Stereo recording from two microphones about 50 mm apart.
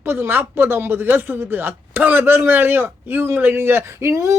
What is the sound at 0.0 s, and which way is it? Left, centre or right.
A man's voice, right.